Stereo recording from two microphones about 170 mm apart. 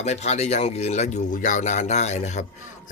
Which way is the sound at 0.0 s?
40° left (ahead or behind).